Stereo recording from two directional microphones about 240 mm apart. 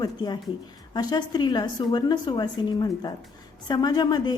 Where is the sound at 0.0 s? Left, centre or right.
Centre.